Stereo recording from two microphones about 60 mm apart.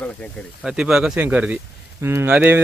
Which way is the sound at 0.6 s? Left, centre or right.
Centre.